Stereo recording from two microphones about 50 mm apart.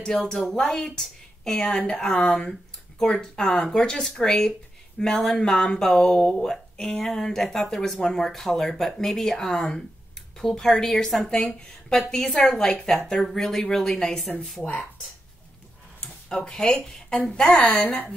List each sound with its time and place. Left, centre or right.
0.2 s a woman's voice: centre
14.6 s a woman's voice: left
16.0 s a woman's voice: centre